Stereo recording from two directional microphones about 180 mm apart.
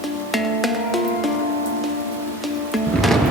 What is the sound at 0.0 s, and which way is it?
Music, centre (ahead or behind).